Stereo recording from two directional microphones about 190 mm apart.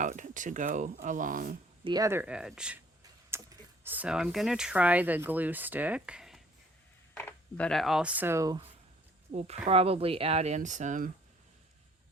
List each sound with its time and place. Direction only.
0.0 s speech: 40° right (ahead or behind)
1.8 s speech: 20° right (ahead or behind); by 6.4 s 5° right (ahead or behind)
7.1 s speech: 10° left (ahead or behind); by 8.6 s 20° right (ahead or behind)
9.3 s speech: 35° right (ahead or behind)